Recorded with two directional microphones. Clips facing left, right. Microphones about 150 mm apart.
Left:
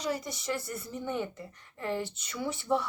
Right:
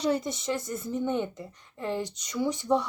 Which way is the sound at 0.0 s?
25° right (ahead or behind).